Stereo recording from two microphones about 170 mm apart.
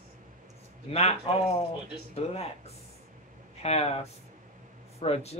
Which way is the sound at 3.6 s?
40° left (ahead or behind).